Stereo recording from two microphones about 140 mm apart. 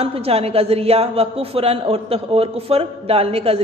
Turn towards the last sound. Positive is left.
turn(degrees=-45)  # may be behind; listen again after turning